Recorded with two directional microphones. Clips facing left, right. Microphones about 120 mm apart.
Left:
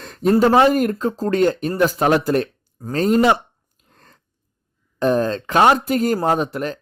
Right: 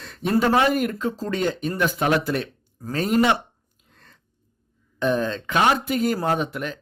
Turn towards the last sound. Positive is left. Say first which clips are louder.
# left 4 dB
turn(degrees=35)  # may be behind; listen again after turning